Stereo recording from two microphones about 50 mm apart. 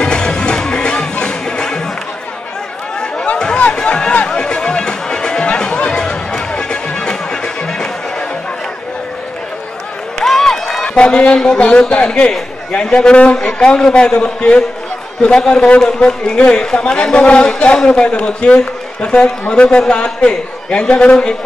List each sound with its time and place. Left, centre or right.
0.0 s music: centre
3.5 s music: left
10.2 s a sound: centre
11.0 s a man's voice: left